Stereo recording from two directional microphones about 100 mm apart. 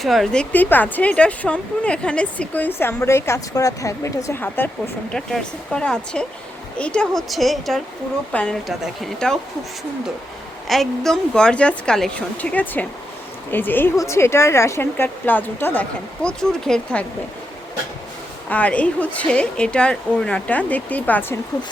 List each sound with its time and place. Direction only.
0.0 s a woman's voice: centre (ahead or behind)
0.5 s speech: 20° left (ahead or behind)
4.4 s speech: 20° left (ahead or behind)
5.1 s a woman's voice: 5° left (ahead or behind)
8.3 s speech: 10° left (ahead or behind)
8.6 s a woman's voice: centre (ahead or behind)
10.7 s speech: 5° left (ahead or behind)
18.4 s speech: 15° left (ahead or behind)